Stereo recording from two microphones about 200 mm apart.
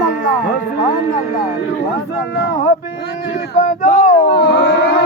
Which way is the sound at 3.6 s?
40° left (ahead or behind).